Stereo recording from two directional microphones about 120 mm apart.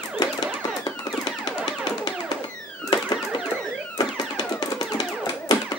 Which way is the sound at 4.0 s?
35° left (ahead or behind).